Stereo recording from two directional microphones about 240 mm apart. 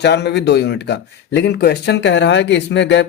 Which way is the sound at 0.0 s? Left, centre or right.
Left.